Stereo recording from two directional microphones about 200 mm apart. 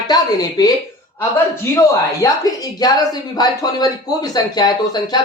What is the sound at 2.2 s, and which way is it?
Speech, 20° left (ahead or behind).